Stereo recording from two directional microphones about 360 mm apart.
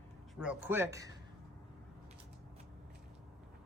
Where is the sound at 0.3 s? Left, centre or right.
Centre.